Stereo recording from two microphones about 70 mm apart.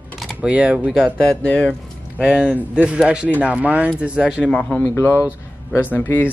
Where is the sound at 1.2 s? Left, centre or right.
Centre.